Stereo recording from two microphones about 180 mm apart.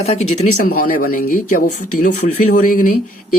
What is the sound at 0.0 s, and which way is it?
Speech, 40° left (ahead or behind).